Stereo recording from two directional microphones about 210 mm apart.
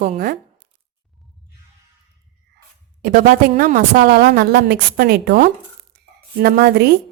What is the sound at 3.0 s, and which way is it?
A woman's voice, 40° right (ahead or behind).